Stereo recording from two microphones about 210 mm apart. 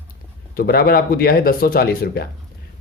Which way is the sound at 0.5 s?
45° left (ahead or behind).